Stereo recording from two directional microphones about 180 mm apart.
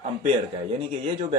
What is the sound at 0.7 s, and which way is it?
Speech, 35° right (ahead or behind).